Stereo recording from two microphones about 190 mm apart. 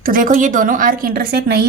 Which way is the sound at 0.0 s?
45° right (ahead or behind).